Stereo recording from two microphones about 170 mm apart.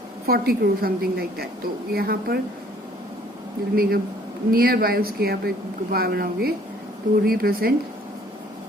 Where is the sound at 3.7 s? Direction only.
60° right (ahead or behind).